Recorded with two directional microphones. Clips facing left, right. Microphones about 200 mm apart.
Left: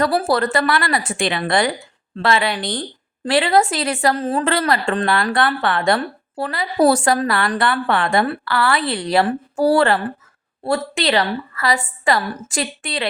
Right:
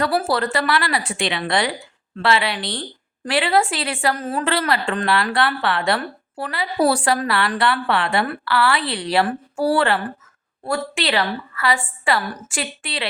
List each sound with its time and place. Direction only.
0.0 s a woman's voice: 40° left (ahead or behind)